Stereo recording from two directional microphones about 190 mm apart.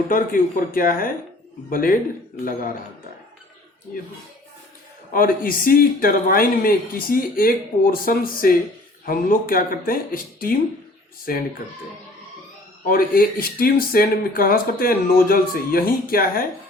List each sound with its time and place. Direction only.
0.1 s speech: 45° left (ahead or behind)
5.1 s speech: 50° left (ahead or behind)
11.3 s speech: 50° left (ahead or behind)
12.8 s speech: 50° left (ahead or behind)